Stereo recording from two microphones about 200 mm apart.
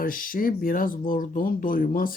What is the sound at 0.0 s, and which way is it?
Speech, 45° left (ahead or behind).